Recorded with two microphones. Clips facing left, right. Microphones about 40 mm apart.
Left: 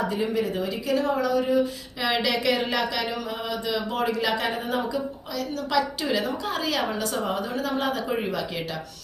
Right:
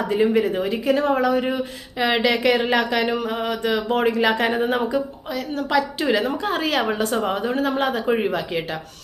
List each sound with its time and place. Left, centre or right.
0.1 s speech: right